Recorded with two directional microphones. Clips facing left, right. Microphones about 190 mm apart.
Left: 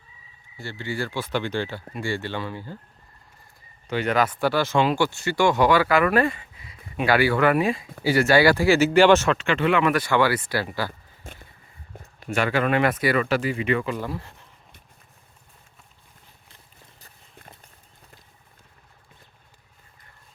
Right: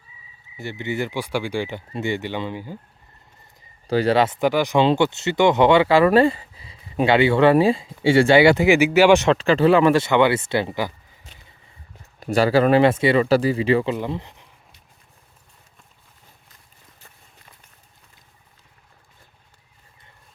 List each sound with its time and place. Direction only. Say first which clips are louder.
0.5 s speech: right 4 dB; 20° right (ahead or behind)
3.8 s speech: right 5 dB; 35° right (ahead or behind); by 9.3 s 15° right (ahead or behind)
9.3 s speech: right 6 dB; 35° right (ahead or behind); by 10.9 s 20° right (ahead or behind)
11.3 s a sound: left 8 dB; 50° left (ahead or behind)
12.2 s speech: right 6 dB; 35° right (ahead or behind); by 14.4 s 20° right (ahead or behind)